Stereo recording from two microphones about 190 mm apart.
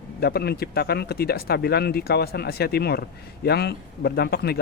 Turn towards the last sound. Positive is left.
turn(degrees=55)  # may be behind; listen again after turning